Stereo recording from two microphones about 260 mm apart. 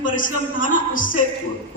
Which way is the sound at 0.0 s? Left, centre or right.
Left.